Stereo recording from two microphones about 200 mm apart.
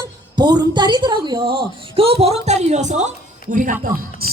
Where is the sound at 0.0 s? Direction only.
20° right (ahead or behind).